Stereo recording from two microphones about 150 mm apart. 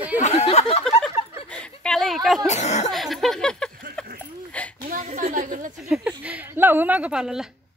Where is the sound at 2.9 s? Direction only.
Centre (ahead or behind).